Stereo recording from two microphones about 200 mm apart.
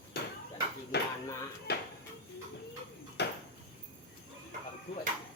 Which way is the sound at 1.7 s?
55° left (ahead or behind).